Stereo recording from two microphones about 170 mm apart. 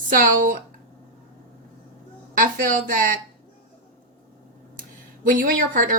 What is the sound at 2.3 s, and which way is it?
Speech, 55° right (ahead or behind).